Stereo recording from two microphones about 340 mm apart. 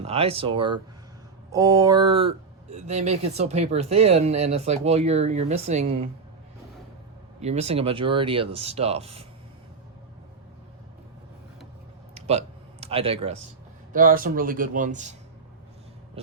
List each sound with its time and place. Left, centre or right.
0.0 s speech: centre
7.4 s speech: centre
12.1 s a sound: centre
13.9 s speech: right